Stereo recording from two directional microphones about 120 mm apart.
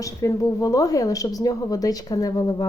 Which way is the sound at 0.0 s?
30° left (ahead or behind).